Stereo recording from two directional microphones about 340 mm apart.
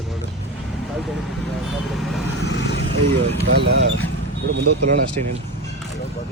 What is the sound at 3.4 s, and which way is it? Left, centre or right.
Speech, right.